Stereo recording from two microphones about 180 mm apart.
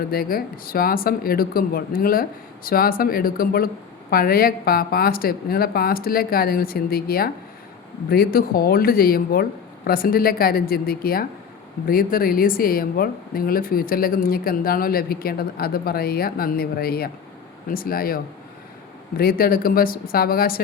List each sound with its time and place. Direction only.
0.1 s speech: 55° left (ahead or behind)